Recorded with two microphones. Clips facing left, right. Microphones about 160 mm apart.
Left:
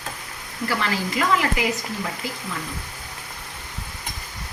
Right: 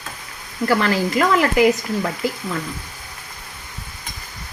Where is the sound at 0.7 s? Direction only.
45° right (ahead or behind).